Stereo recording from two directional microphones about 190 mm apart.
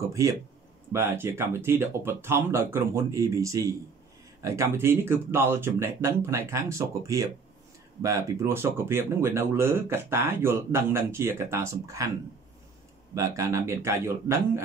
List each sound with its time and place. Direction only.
0.1 s speech: 15° right (ahead or behind)
13.1 s speech: 15° right (ahead or behind)